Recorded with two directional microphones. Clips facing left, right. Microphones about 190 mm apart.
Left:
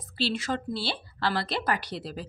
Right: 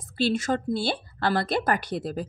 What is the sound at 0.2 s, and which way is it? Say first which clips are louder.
A woman's voice: right 5 dB; 45° right (ahead or behind).